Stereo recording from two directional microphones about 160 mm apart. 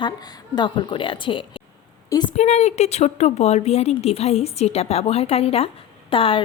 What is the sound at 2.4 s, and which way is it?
A woman's voice, 45° left (ahead or behind).